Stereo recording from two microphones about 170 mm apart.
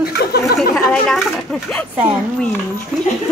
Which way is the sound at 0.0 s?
65° left (ahead or behind).